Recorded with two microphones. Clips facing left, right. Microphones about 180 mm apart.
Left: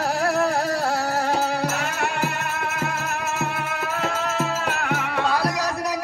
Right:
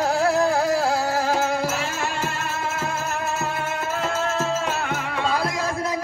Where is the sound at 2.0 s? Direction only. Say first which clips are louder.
Left 2 dB; 65° left (ahead or behind).